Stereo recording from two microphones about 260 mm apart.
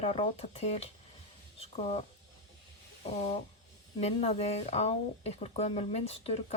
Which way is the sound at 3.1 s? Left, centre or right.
Left.